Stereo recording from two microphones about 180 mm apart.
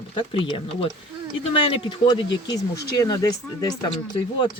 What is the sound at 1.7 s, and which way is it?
Speech, 30° left (ahead or behind).